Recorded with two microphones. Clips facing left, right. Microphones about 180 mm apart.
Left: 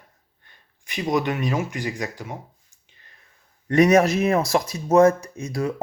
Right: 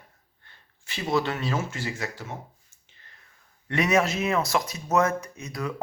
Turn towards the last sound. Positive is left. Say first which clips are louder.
# left 6 dB
turn(degrees=30)  # may be behind; listen again after turning